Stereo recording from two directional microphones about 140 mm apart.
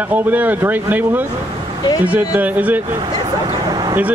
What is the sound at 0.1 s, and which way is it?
Speech, 10° right (ahead or behind).